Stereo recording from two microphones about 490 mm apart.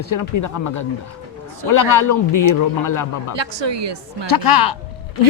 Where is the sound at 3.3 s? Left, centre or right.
Right.